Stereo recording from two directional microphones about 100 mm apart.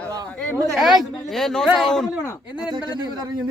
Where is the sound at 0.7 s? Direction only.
Centre (ahead or behind).